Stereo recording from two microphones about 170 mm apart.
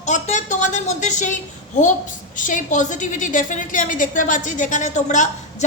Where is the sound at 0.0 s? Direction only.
45° left (ahead or behind).